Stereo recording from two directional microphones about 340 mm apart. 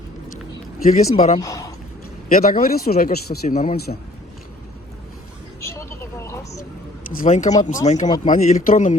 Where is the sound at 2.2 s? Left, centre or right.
Left.